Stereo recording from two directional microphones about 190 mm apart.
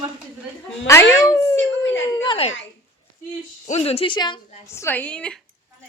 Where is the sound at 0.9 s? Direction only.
15° left (ahead or behind).